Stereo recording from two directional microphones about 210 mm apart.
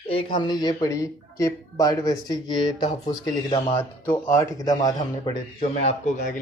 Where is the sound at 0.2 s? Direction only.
20° left (ahead or behind).